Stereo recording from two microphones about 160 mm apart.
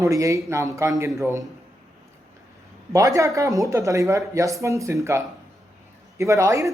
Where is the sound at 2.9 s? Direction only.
20° right (ahead or behind).